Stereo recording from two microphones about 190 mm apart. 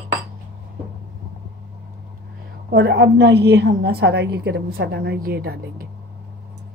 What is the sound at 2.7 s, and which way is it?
A woman's voice, 60° right (ahead or behind).